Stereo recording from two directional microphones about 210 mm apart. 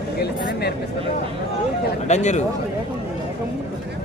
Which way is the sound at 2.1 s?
35° left (ahead or behind).